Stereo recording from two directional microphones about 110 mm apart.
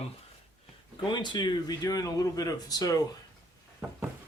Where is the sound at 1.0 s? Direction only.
45° left (ahead or behind).